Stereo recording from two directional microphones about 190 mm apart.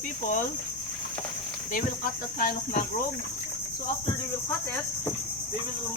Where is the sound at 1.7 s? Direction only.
50° left (ahead or behind).